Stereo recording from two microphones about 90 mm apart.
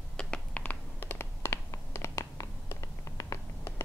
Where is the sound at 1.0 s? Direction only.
25° left (ahead or behind).